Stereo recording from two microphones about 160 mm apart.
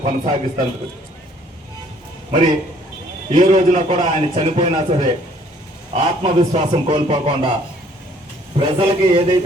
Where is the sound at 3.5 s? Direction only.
40° right (ahead or behind).